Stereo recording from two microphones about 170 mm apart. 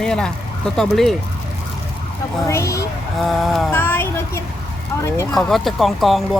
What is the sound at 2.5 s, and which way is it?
Speech, 15° left (ahead or behind).